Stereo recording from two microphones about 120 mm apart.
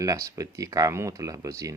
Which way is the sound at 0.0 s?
25° right (ahead or behind).